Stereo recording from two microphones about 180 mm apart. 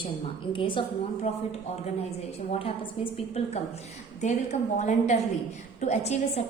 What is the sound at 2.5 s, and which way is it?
A woman's voice, 30° left (ahead or behind).